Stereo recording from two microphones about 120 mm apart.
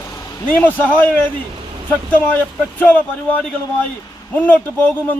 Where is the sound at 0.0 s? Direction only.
25° left (ahead or behind).